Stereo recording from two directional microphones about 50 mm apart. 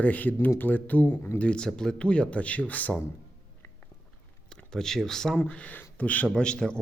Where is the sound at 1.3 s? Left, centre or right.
Left.